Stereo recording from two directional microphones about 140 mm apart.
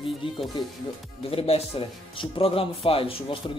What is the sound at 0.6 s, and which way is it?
Speech, 35° left (ahead or behind).